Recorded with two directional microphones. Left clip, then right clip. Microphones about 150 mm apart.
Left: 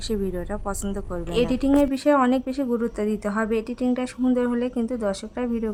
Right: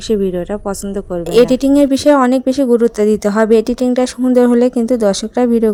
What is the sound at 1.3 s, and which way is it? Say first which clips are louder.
Speech: right 11 dB; 45° right (ahead or behind).